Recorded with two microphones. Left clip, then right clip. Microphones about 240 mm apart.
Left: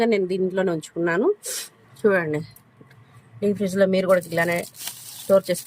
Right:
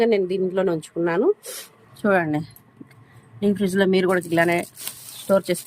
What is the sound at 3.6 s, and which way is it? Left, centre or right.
Speech, centre.